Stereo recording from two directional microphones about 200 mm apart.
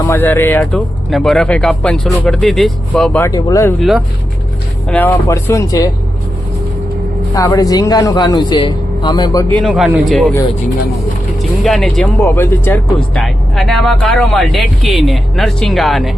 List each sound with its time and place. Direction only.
0.0 s speech: 10° left (ahead or behind)
3.8 s speech: centre (ahead or behind)
4.9 s speech: 10° left (ahead or behind)
7.3 s a man's voice: 15° left (ahead or behind)
9.6 s speech: centre (ahead or behind)
11.6 s speech: centre (ahead or behind)